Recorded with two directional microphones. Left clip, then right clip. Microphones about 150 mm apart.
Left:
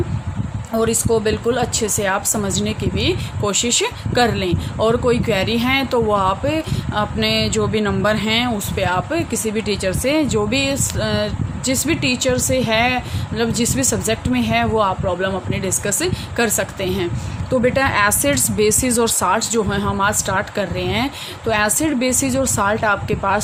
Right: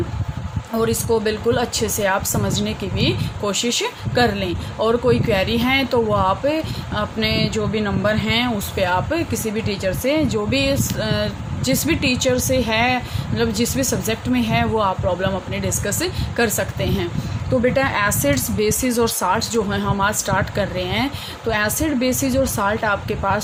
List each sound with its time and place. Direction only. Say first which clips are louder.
0.7 s speech: left 2 dB; 25° left (ahead or behind)